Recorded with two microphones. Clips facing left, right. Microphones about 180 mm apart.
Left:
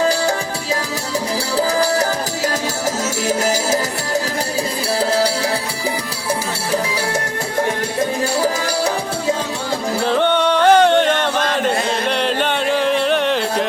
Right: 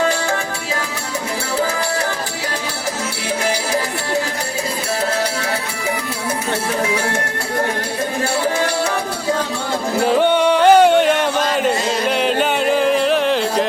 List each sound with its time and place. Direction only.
3.2 s music: 40° left (ahead or behind)
10.1 s music: 10° right (ahead or behind)